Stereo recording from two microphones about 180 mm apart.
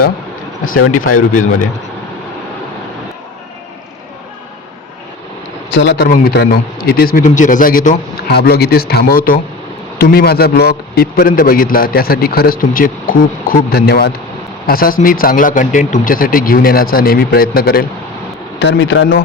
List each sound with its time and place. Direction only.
0.9 s speech: 45° left (ahead or behind)
5.7 s speech: 85° left
6.1 s a man's voice: 65° left (ahead or behind)
18.6 s speech: 80° left